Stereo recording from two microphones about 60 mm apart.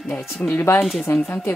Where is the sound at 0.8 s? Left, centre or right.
Centre.